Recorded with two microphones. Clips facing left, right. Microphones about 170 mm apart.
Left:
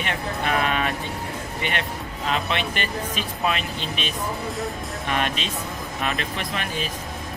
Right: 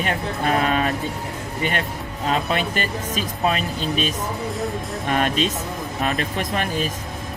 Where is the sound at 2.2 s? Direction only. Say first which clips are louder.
Right 3 dB; 40° right (ahead or behind).